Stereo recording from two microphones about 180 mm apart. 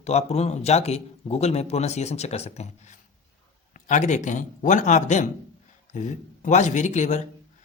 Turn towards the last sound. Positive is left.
turn(degrees=40)  # may be behind; listen again after turning